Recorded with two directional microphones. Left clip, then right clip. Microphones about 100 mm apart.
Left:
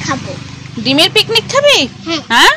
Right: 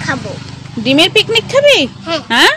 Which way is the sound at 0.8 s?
80° right.